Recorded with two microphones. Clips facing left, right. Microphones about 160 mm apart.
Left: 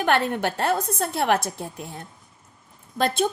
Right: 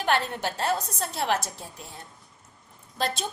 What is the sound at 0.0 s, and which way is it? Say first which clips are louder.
A woman's voice: left 4 dB; 55° left (ahead or behind).